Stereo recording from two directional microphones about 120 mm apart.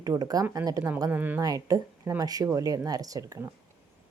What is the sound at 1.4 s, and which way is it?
Speech, 30° right (ahead or behind).